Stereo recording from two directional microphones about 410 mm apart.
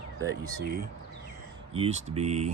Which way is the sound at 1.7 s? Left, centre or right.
Centre.